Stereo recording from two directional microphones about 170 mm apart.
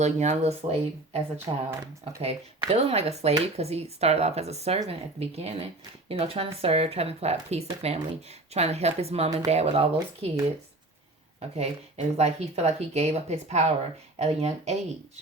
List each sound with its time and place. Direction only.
0.0 s speech: 40° right (ahead or behind)
1.5 s speech: 25° right (ahead or behind)
2.2 s speech: 40° right (ahead or behind)
11.3 s speech: 40° right (ahead or behind)